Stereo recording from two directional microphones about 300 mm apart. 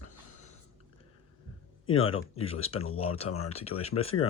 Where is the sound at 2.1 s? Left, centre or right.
Centre.